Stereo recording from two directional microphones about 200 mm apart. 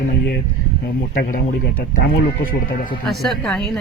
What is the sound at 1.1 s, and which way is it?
Speech, 40° left (ahead or behind).